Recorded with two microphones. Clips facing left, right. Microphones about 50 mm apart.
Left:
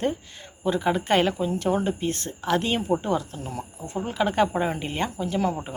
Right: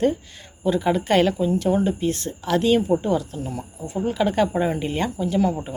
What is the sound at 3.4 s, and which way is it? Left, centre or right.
Speech, left.